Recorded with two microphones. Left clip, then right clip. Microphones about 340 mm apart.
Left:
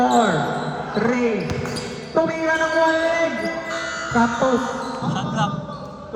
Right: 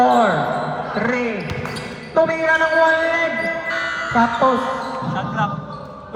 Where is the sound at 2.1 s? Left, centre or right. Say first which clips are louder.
Right 4 dB; right.